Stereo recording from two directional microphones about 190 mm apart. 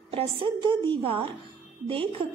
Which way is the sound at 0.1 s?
30° right (ahead or behind).